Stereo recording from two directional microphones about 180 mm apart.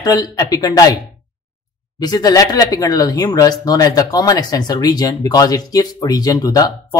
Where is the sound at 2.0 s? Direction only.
20° left (ahead or behind).